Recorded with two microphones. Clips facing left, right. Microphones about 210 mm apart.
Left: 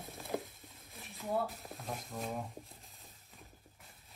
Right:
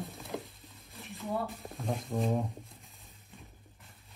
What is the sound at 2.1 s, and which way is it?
Speech, 30° right (ahead or behind).